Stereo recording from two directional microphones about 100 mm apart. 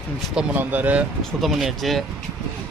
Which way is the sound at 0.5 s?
20° right (ahead or behind).